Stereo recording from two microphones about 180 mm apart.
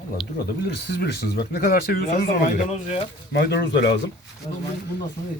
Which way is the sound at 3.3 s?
65° left (ahead or behind).